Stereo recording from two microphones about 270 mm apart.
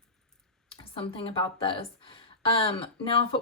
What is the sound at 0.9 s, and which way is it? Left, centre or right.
Speech, centre.